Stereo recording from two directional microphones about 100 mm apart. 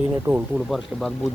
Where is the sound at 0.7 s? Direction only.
5° left (ahead or behind).